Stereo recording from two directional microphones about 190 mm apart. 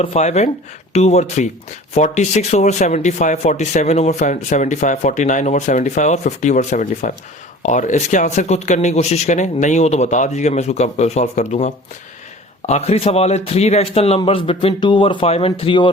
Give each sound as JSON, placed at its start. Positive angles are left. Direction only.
{"t": 0.0, "sound": "speech", "side_deg": 35}